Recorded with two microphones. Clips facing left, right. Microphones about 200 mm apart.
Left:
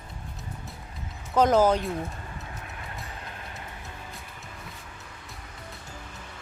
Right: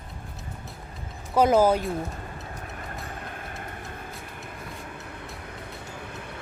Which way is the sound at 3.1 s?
50° right (ahead or behind).